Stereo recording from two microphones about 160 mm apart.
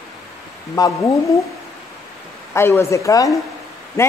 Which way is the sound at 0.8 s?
25° left (ahead or behind).